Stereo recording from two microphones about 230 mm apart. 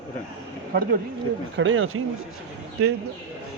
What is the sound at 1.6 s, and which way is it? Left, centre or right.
Speech, right.